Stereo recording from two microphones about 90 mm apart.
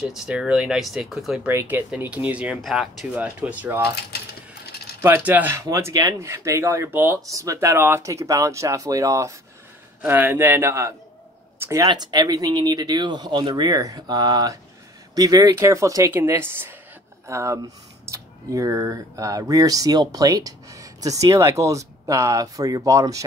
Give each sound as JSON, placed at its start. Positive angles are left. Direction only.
{"t": 0.0, "sound": "speech", "side_deg": -10}
{"t": 1.5, "sound": "a man's voice", "side_deg": -25}
{"t": 2.7, "sound": "speech", "side_deg": 0}
{"t": 3.2, "sound": "speech", "side_deg": -15}
{"t": 5.0, "sound": "a man's voice", "side_deg": -25}
{"t": 5.6, "sound": "speech", "side_deg": -35}
{"t": 6.9, "sound": "a man's voice", "side_deg": -25}
{"t": 7.2, "sound": "speech", "side_deg": -40}
{"t": 10.0, "sound": "a man's voice", "side_deg": -20}
{"t": 11.8, "sound": "speech", "side_deg": -50}